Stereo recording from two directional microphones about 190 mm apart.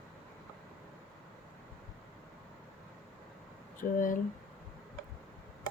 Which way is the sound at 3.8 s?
45° left (ahead or behind).